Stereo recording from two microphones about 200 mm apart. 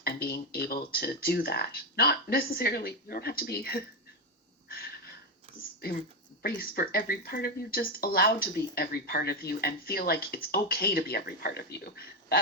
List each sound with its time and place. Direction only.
0.0 s speech: 50° left (ahead or behind)
4.7 s a sound: 50° left (ahead or behind)
6.4 s speech: 50° left (ahead or behind)